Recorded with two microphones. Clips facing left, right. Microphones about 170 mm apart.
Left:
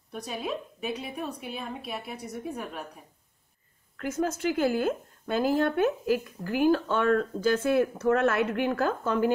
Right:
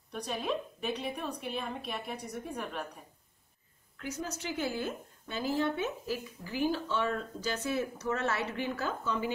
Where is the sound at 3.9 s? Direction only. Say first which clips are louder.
Left 9 dB; 50° left (ahead or behind).